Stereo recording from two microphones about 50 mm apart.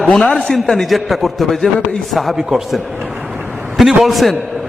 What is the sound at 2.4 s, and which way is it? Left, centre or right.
Speech, centre.